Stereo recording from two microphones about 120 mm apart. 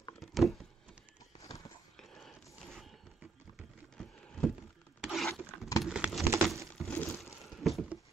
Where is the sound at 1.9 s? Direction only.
Centre (ahead or behind).